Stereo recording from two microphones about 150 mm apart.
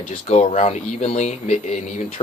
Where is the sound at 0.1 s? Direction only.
40° left (ahead or behind).